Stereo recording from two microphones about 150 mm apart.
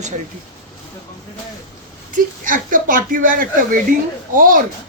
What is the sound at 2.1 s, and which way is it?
Speech, 60° right (ahead or behind).